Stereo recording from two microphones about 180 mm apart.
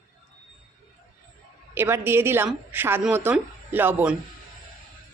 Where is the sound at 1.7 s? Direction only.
15° right (ahead or behind).